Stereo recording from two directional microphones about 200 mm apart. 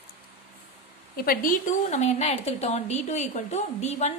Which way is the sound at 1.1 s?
45° left (ahead or behind).